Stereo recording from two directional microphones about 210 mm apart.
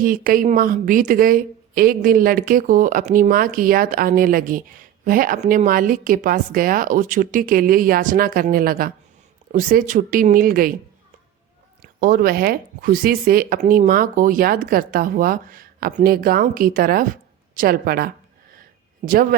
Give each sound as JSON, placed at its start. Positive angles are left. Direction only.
{"t": 0.0, "sound": "a woman's voice", "side_deg": -40}
{"t": 11.8, "sound": "a woman's voice", "side_deg": -45}